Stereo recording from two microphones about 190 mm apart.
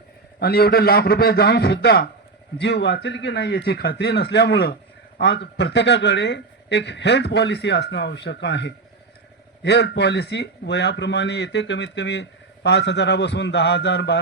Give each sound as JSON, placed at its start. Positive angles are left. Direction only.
{"t": 0.3, "sound": "a man's voice", "side_deg": 55}